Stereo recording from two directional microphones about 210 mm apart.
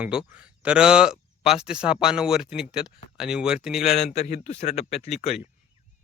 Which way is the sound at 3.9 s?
35° left (ahead or behind).